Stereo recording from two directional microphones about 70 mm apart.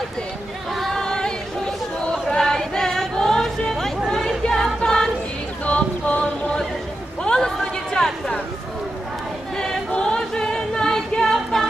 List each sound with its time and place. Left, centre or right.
0.7 s singing: centre
2.0 s music: centre
5.6 s a sound: centre
9.6 s choir: centre